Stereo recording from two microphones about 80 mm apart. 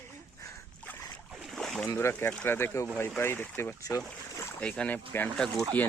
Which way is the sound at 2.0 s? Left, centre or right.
Left.